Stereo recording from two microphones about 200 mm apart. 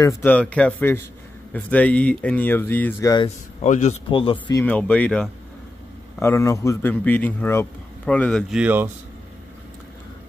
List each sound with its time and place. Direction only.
0.0 s speech: 10° left (ahead or behind)
3.6 s speech: 35° left (ahead or behind)
4.6 s speech: 10° left (ahead or behind); by 8.9 s 10° right (ahead or behind)